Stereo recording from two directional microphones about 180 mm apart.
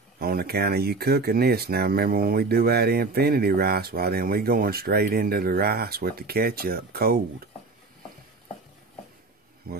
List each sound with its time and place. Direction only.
0.2 s speech: 60° right (ahead or behind)
9.6 s speech: 60° right (ahead or behind)